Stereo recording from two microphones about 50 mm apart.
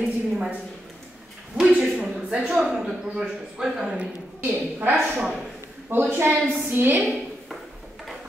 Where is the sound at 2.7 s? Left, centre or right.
Centre.